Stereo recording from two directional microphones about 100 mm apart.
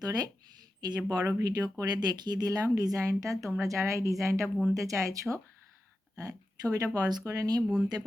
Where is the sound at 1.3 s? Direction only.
40° right (ahead or behind).